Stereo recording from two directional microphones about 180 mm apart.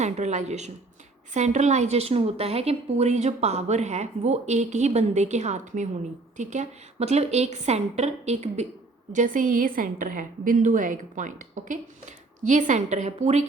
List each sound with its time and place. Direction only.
0.0 s a woman's voice: 40° right (ahead or behind)